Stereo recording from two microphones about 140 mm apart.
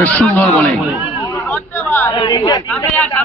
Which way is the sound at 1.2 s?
15° left (ahead or behind).